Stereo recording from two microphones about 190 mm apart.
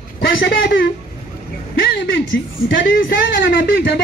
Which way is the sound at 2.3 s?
75° left (ahead or behind).